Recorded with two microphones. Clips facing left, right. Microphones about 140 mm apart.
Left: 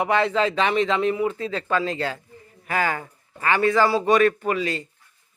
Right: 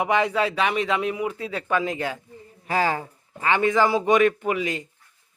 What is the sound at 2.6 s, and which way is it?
Speech, 30° right (ahead or behind).